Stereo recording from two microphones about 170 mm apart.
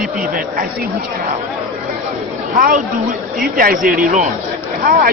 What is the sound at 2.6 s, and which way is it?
Speech, 55° right (ahead or behind).